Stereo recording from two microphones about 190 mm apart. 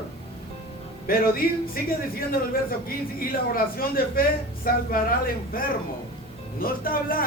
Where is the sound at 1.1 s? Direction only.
50° left (ahead or behind).